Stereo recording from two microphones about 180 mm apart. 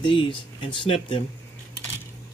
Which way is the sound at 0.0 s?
30° left (ahead or behind).